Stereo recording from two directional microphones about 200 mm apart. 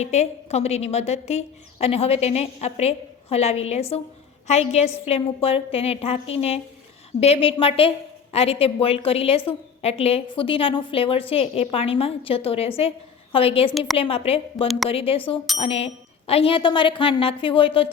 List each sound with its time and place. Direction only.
0.0 s a woman's voice: 35° left (ahead or behind)
13.7 s a woman's voice: centre (ahead or behind)
13.9 s a woman's voice: 30° left (ahead or behind)